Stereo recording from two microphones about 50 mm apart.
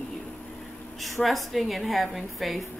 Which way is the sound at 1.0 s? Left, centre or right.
Centre.